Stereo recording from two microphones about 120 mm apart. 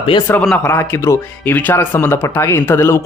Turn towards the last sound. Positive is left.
turn(degrees=20)  # may be behind; listen again after turning